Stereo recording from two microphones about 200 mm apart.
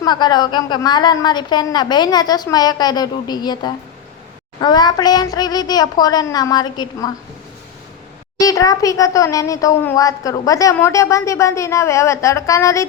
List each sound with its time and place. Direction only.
0.0 s a woman's voice: 20° left (ahead or behind)
8.4 s a child's voice: 15° left (ahead or behind)